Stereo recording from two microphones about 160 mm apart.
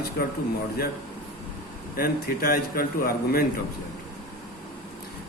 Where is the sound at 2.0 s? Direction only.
70° left (ahead or behind).